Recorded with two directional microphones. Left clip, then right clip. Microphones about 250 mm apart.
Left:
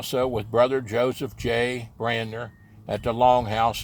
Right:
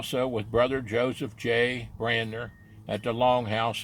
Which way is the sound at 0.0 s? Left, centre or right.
Left.